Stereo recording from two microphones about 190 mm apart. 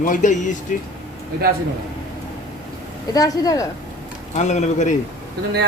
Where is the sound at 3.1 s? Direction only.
20° left (ahead or behind).